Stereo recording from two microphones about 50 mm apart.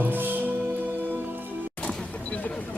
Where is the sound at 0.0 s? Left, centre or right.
Right.